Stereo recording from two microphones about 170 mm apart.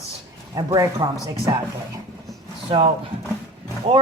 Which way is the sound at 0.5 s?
20° right (ahead or behind).